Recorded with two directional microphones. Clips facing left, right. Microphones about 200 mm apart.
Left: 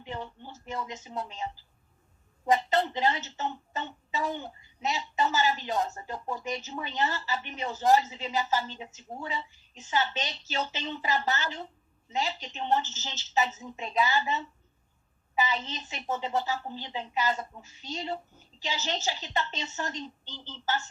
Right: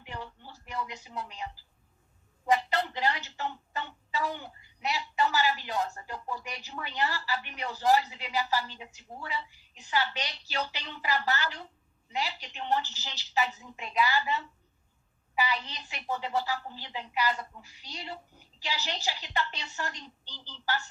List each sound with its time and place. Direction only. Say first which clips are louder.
0.1 s speech: left 4 dB; 20° left (ahead or behind)
2.5 s a woman's voice: left 2 dB; 20° left (ahead or behind)